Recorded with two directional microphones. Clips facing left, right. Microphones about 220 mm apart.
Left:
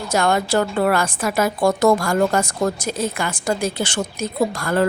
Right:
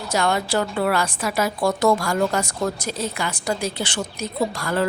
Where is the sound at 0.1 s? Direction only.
50° left (ahead or behind).